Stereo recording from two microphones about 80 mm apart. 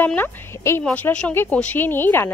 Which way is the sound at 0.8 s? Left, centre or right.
Centre.